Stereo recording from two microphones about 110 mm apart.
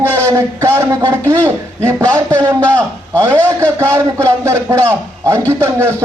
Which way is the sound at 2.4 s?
10° left (ahead or behind).